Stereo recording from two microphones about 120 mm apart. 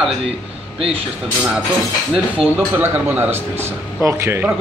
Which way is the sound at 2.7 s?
15° right (ahead or behind).